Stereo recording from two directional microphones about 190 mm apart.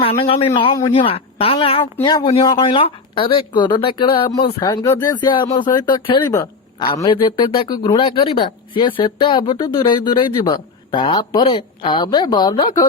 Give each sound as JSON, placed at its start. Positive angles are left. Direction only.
{"t": 0.0, "sound": "a man's voice", "side_deg": 30}